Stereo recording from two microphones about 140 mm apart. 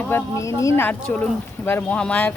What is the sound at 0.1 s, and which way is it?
Speech, 20° left (ahead or behind).